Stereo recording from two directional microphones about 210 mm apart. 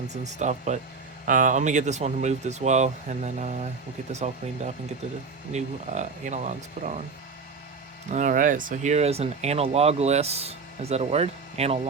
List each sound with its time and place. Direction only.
0.1 s speech: 35° right (ahead or behind)
8.1 s speech: 35° right (ahead or behind)